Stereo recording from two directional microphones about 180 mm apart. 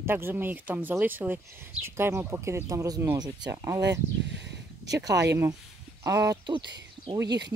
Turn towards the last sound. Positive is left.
turn(degrees=-70)  # may be behind; listen again after turning